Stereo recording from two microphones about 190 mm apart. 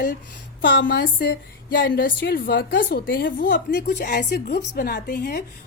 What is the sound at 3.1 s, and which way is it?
A woman's voice, 55° left (ahead or behind).